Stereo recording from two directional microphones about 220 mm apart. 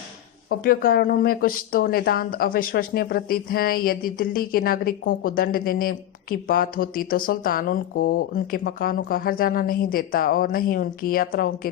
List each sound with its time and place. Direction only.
0.5 s speech: 40° left (ahead or behind)